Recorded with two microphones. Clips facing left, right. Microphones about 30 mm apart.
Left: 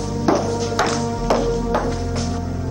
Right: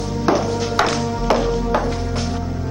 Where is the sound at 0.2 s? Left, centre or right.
Right.